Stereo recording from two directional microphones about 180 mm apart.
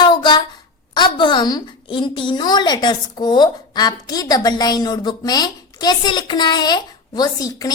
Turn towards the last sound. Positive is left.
turn(degrees=20)  # may be behind; listen again after turning